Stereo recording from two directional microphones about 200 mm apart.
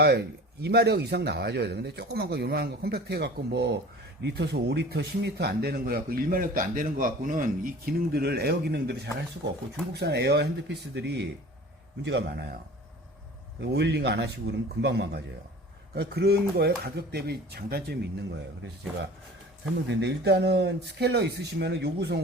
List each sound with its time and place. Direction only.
0.0 s a man's voice: 55° right (ahead or behind)
13.6 s a man's voice: 60° right (ahead or behind)
19.9 s a man's voice: 60° right (ahead or behind)